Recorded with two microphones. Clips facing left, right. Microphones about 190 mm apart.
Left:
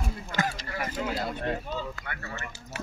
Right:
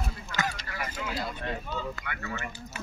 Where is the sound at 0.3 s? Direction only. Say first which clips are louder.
Left 3 dB; 45° left (ahead or behind).